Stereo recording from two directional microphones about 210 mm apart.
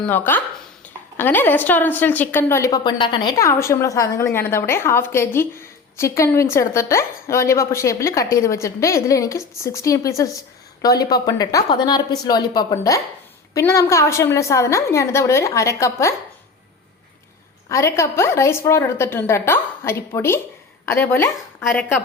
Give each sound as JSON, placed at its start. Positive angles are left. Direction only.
{"t": 0.0, "sound": "a woman's voice", "side_deg": 10}
{"t": 17.7, "sound": "a woman's voice", "side_deg": 15}